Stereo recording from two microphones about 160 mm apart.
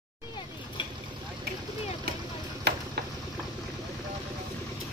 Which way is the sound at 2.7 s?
90° right.